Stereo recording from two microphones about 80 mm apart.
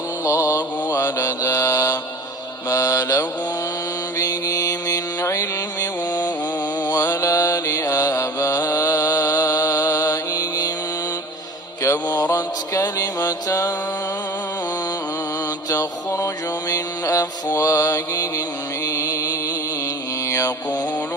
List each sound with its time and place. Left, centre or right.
0.3 s mantra: left
4.2 s music: left
5.2 s mantra: left
12.0 s mantra: left
15.7 s mantra: left
18.9 s music: left
20.2 s mantra: left